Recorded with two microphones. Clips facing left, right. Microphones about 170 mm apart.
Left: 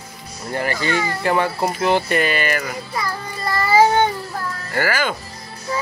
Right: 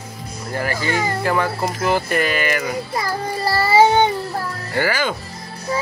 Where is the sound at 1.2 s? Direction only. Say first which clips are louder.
Left 4 dB; 20° left (ahead or behind).